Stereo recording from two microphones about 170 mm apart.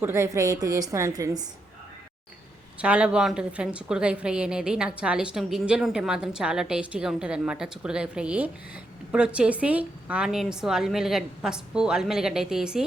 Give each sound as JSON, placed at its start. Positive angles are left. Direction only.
{"t": 0.0, "sound": "a woman's voice", "side_deg": -15}
{"t": 2.7, "sound": "a woman's voice", "side_deg": -5}